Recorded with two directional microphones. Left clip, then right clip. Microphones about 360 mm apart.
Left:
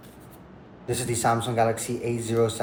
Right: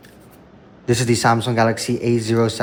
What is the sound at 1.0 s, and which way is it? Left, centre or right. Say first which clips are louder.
Speech: right 6 dB; right.